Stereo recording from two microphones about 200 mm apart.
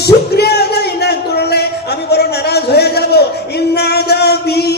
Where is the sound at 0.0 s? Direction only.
55° left (ahead or behind).